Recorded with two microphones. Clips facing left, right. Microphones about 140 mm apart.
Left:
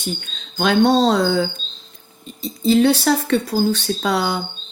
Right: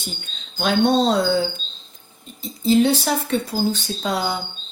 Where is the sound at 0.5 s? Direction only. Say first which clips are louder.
Left 3 dB; 90° left.